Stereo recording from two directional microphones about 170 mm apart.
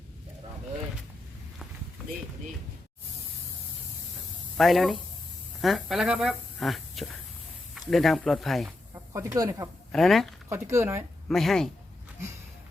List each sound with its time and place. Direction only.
4.5 s speech: centre (ahead or behind)
9.1 s speech: 20° right (ahead or behind)
9.9 s speech: centre (ahead or behind)
10.5 s speech: 15° right (ahead or behind)
11.3 s speech: centre (ahead or behind)